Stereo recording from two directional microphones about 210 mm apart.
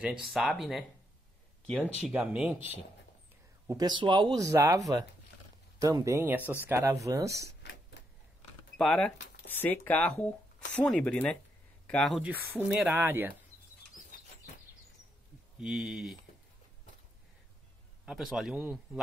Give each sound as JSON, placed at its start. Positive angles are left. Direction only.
{"t": 0.0, "sound": "speech", "side_deg": -5}
{"t": 3.6, "sound": "speech", "side_deg": -20}
{"t": 7.6, "sound": "a sound", "side_deg": 55}
{"t": 8.7, "sound": "speech", "side_deg": 5}
{"t": 15.6, "sound": "speech", "side_deg": -5}
{"t": 18.0, "sound": "speech", "side_deg": 0}